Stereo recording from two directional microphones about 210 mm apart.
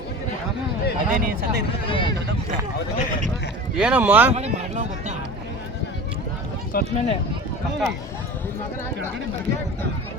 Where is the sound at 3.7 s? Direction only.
5° right (ahead or behind).